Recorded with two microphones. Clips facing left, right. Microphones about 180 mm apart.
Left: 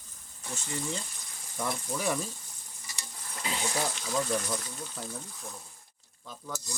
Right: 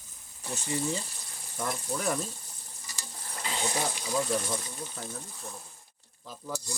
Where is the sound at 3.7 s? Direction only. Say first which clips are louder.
Right 1 dB; 15° right (ahead or behind).